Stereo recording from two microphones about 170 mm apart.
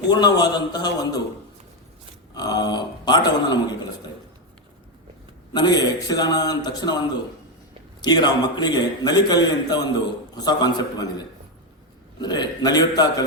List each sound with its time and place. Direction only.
0.1 s a man's voice: 25° left (ahead or behind)
2.3 s speech: 20° left (ahead or behind)
5.5 s a man's voice: 25° left (ahead or behind)
8.0 s a man's voice: 25° left (ahead or behind)
12.2 s a man's voice: 25° left (ahead or behind)